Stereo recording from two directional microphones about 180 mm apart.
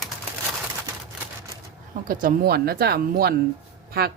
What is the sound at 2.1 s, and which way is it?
Speech, 50° right (ahead or behind).